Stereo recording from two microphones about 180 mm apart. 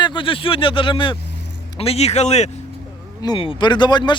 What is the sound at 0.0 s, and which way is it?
Speech, 25° left (ahead or behind).